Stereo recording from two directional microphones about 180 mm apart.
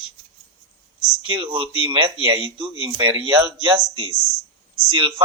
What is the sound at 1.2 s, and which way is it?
Speech, 30° right (ahead or behind).